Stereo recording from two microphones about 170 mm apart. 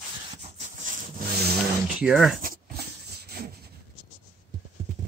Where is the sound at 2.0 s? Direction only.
Centre (ahead or behind).